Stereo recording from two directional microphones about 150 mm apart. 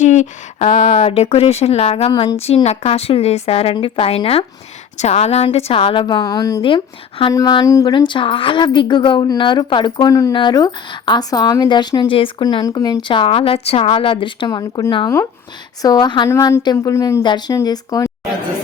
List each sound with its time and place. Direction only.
0.0 s a woman's voice: 50° left (ahead or behind); by 6.6 s 25° left (ahead or behind)
6.6 s a woman's voice: 35° left (ahead or behind)
7.3 s a woman's voice: 25° left (ahead or behind)